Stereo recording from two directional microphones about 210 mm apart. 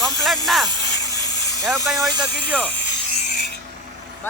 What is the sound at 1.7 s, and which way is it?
Speech, 15° right (ahead or behind).